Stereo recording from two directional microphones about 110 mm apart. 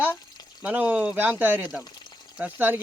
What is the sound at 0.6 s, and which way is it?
Speech, 15° right (ahead or behind).